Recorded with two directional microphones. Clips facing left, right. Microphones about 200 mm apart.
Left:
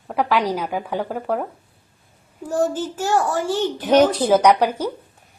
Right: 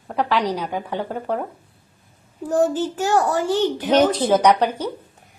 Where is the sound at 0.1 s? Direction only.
10° left (ahead or behind).